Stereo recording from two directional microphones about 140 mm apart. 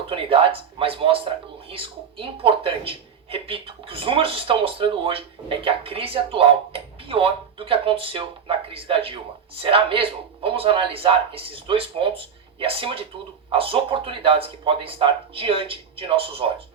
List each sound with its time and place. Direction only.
0.1 s speech: 40° right (ahead or behind)